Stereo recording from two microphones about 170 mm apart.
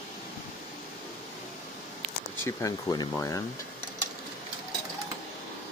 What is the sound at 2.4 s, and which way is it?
Speech, 20° left (ahead or behind).